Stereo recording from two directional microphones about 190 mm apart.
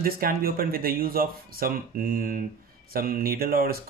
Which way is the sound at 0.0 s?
50° right (ahead or behind).